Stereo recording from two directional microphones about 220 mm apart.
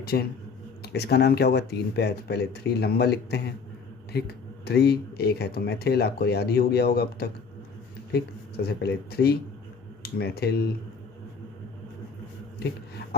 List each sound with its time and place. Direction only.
0.0 s speech: 45° left (ahead or behind)